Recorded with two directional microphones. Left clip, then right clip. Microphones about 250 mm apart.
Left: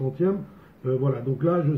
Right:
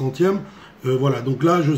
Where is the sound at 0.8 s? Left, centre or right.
Right.